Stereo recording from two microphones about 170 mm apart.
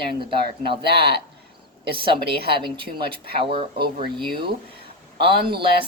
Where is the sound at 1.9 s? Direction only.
30° right (ahead or behind).